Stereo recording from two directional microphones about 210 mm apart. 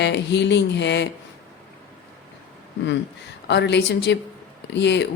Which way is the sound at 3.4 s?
55° left (ahead or behind).